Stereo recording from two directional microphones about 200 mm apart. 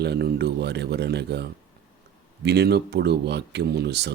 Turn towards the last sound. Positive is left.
turn(degrees=-55)  # may be behind; listen again after turning